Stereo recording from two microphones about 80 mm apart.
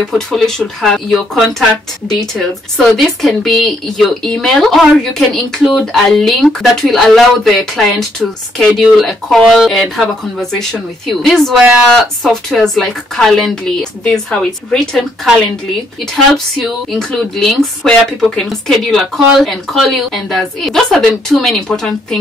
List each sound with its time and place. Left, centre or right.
0.1 s speech: centre
16.5 s speech: centre